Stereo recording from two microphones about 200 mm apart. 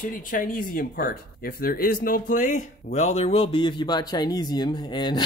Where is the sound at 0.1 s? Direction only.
45° left (ahead or behind).